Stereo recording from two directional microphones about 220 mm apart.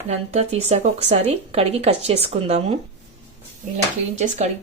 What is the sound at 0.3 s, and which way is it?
Speech, 30° right (ahead or behind).